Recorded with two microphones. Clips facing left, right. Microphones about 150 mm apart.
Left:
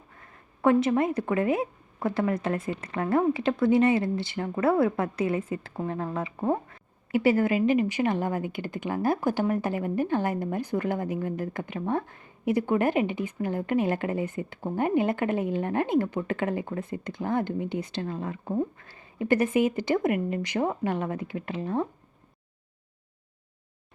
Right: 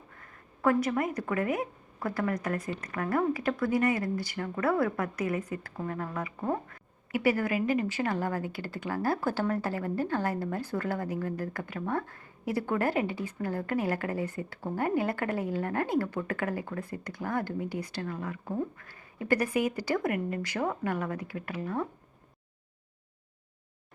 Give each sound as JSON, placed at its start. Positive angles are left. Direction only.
{"t": 0.6, "sound": "a woman's voice", "side_deg": 25}